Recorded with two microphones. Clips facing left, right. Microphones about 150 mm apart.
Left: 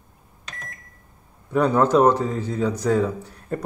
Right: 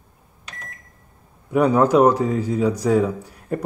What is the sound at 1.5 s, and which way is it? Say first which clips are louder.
A man's voice: right 2 dB; 10° right (ahead or behind).